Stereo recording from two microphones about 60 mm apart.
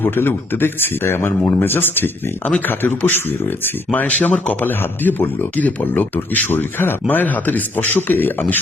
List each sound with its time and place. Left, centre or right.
0.0 s speech: left